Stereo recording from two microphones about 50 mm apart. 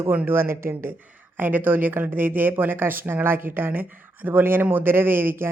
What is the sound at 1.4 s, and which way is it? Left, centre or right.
A woman's voice, right.